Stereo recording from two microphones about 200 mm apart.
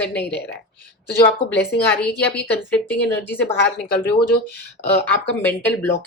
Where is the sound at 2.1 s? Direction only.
10° left (ahead or behind).